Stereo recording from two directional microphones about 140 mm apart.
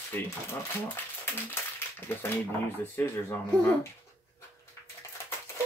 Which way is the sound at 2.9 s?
20° left (ahead or behind).